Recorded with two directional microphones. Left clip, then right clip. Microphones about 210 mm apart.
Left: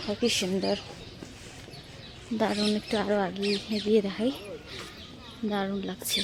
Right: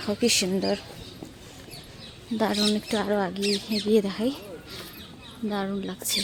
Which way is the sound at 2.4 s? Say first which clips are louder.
Right 3 dB; 10° right (ahead or behind).